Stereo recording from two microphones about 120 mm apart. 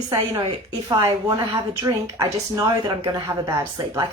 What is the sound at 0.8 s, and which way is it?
A woman's voice, 30° right (ahead or behind).